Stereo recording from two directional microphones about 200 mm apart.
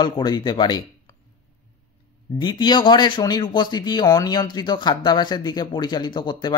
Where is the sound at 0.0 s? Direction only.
20° left (ahead or behind).